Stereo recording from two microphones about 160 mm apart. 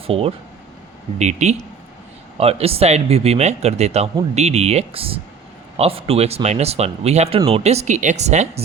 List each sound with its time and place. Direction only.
0.1 s speech: 35° right (ahead or behind)